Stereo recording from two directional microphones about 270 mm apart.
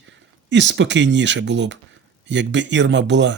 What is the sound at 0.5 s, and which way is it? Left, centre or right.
Speech, right.